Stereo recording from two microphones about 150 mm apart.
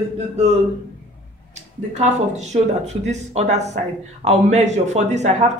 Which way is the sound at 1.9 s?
50° right (ahead or behind).